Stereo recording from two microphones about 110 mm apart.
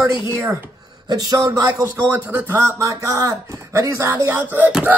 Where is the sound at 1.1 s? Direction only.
40° right (ahead or behind).